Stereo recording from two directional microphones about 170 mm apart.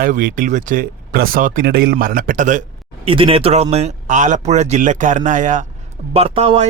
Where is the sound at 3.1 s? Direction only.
35° right (ahead or behind).